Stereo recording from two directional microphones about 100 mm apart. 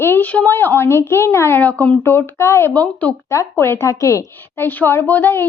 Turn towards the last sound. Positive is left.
turn(degrees=20)  # may be behind; listen again after turning